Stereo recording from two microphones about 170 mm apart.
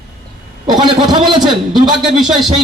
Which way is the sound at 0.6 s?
25° right (ahead or behind).